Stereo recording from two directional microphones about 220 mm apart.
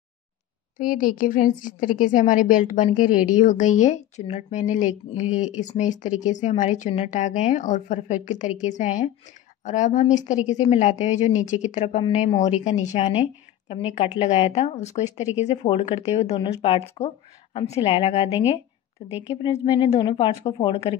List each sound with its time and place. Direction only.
0.7 s a woman's voice: 40° left (ahead or behind); by 20.9 s 25° left (ahead or behind)